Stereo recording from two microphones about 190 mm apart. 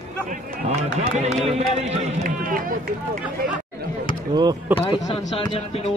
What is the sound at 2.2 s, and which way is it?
Run, 50° right (ahead or behind).